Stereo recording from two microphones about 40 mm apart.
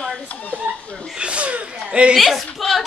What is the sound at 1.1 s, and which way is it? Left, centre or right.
A woman's voice, right.